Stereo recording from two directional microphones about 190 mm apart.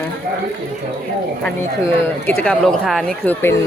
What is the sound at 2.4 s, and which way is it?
Speech, 5° left (ahead or behind).